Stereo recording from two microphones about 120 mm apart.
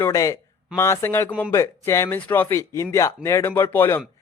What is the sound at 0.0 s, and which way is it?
Speech, 25° left (ahead or behind).